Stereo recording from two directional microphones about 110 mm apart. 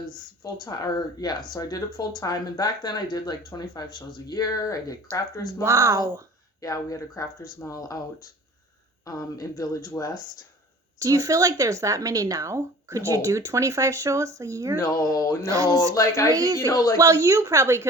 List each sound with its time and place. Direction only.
0.4 s speech: 35° left (ahead or behind)
5.6 s speech: 30° right (ahead or behind)
6.6 s speech: 30° left (ahead or behind)
11.0 s a woman's voice: 30° right (ahead or behind)
14.8 s speech: 30° left (ahead or behind)
15.4 s speech: 30° right (ahead or behind)
16.0 s speech: 25° left (ahead or behind)
16.3 s speech: 35° right (ahead or behind)
16.6 s speech: 30° left (ahead or behind)
17.0 s a woman's voice: 30° right (ahead or behind)